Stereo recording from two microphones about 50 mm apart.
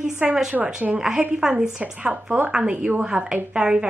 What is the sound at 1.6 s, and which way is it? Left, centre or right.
A woman's voice, right.